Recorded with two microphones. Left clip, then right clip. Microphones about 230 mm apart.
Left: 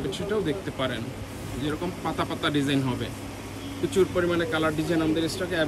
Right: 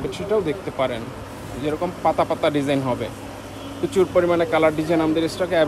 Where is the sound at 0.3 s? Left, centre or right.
Right.